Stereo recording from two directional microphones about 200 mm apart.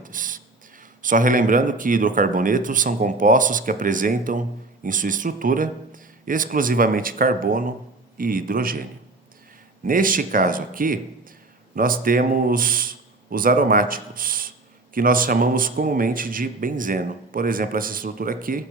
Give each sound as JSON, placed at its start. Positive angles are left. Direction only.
{"t": 0.0, "sound": "a sound", "side_deg": -40}
{"t": 1.0, "sound": "speech", "side_deg": -40}
{"t": 9.8, "sound": "speech", "side_deg": -45}